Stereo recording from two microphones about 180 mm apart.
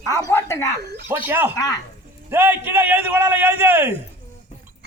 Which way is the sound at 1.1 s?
10° right (ahead or behind).